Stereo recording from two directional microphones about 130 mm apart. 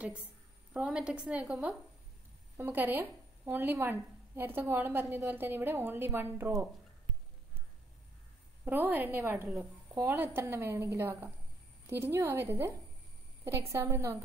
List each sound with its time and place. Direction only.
0.7 s a woman's voice: 5° right (ahead or behind)
2.5 s a woman's voice: 20° right (ahead or behind)
8.6 s a woman's voice: 15° right (ahead or behind)